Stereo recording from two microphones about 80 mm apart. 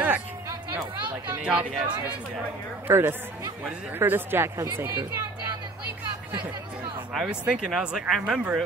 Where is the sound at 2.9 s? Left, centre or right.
Right.